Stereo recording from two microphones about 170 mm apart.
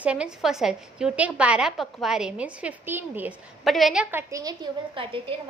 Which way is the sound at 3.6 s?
Centre (ahead or behind).